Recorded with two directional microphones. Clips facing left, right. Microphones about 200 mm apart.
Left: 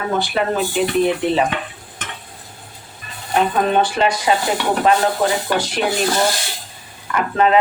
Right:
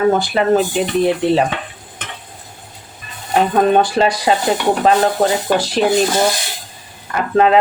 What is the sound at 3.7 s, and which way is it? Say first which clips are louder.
Speech: right 4 dB; 40° right (ahead or behind).